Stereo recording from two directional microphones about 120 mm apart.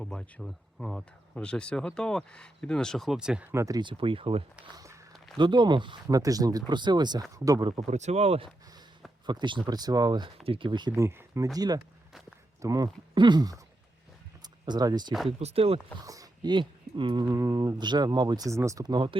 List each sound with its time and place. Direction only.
0.0 s speech: 5° left (ahead or behind)
3.5 s speech: 25° right (ahead or behind)
3.8 s speech: 45° right (ahead or behind)
5.4 s speech: 40° right (ahead or behind)
6.1 s speech: 30° right (ahead or behind)
7.8 s speech: 70° right (ahead or behind)
9.2 s speech: 40° right (ahead or behind)
10.4 s speech: 45° right (ahead or behind)
10.9 s speech: 25° right (ahead or behind)
14.4 s a sound: 35° right (ahead or behind)
15.4 s speech: 60° right (ahead or behind)
16.0 s speech: 30° right (ahead or behind)